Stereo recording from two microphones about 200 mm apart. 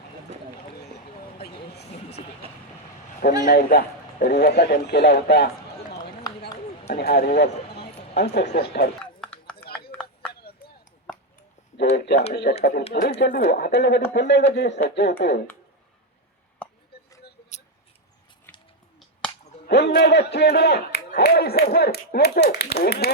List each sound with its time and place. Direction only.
1.4 s a sound: 55° left (ahead or behind)
1.9 s vehicle: 30° left (ahead or behind)
3.4 s a man's voice: 55° left (ahead or behind)
6.3 s run: 20° left (ahead or behind)
6.9 s speech: 50° left (ahead or behind)
9.2 s a sound: 5° left (ahead or behind)
11.9 s a sound: 55° left (ahead or behind)
12.3 s a man's voice: 55° left (ahead or behind)
12.5 s speech: 35° left (ahead or behind)
12.9 s a man's voice: 50° left (ahead or behind)
16.6 s a sound: 5° left (ahead or behind)
19.6 s a man's voice: 60° left (ahead or behind)